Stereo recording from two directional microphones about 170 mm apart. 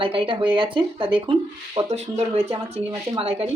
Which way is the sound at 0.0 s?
30° right (ahead or behind).